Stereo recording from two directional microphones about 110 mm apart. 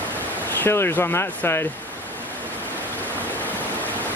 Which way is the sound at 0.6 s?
20° left (ahead or behind).